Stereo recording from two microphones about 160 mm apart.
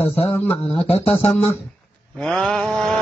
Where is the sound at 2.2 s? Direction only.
5° left (ahead or behind).